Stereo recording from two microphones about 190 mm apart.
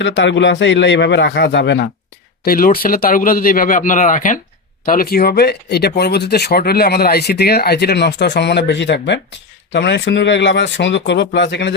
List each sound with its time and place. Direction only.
0.0 s speech: 70° left (ahead or behind)
2.4 s speech: 50° left (ahead or behind)